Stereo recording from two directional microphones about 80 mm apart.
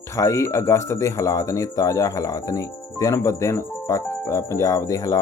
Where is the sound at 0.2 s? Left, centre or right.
Left.